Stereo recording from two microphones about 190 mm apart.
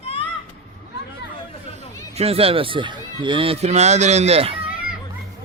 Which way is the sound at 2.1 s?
30° right (ahead or behind).